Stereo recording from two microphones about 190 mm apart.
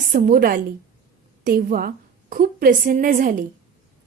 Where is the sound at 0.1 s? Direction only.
50° right (ahead or behind).